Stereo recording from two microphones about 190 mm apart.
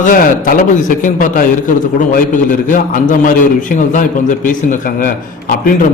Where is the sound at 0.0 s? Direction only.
45° left (ahead or behind).